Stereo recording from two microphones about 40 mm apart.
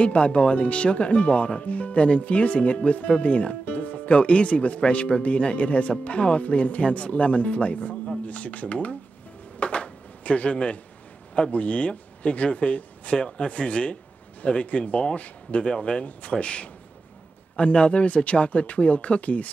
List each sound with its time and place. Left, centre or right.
0.0 s speech: left
9.6 s a sound: left
11.5 s speech: left
15.6 s speech: left